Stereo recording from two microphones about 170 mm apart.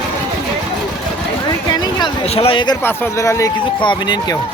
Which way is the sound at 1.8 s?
25° left (ahead or behind).